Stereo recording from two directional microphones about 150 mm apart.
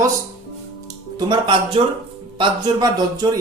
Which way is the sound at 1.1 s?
30° right (ahead or behind).